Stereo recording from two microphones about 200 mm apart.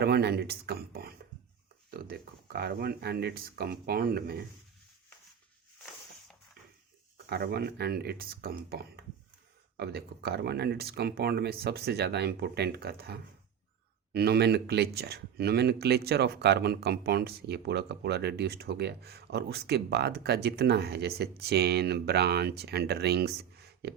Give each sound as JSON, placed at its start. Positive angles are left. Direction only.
{"t": 0.0, "sound": "speech", "side_deg": -55}
{"t": 7.3, "sound": "speech", "side_deg": -55}